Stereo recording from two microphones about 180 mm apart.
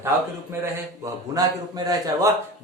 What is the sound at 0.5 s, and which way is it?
A man's voice, 15° right (ahead or behind).